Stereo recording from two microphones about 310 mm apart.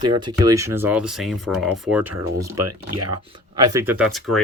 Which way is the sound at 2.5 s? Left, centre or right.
Right.